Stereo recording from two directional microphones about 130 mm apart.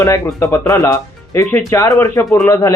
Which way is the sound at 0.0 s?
20° left (ahead or behind).